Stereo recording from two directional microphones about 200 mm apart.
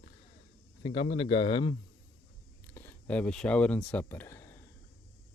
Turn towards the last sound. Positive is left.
turn(degrees=10)  # may be behind; listen again after turning